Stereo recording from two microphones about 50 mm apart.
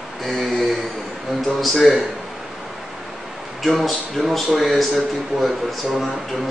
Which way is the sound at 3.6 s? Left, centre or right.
Centre.